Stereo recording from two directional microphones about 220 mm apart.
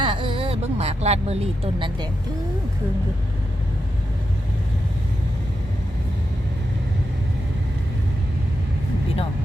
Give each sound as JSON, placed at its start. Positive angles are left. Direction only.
{"t": 0.0, "sound": "speech", "side_deg": -20}